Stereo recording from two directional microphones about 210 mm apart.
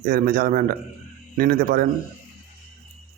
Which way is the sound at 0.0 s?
40° right (ahead or behind).